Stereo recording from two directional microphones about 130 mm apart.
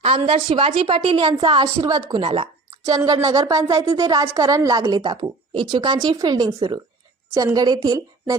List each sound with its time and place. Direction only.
0.0 s a woman's voice: 50° right (ahead or behind); by 2.2 s 30° right (ahead or behind)
2.2 s speech: 50° right (ahead or behind)
2.8 s speech: 30° right (ahead or behind)